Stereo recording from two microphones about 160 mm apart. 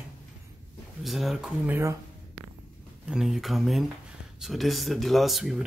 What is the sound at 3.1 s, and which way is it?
Speech, 5° right (ahead or behind).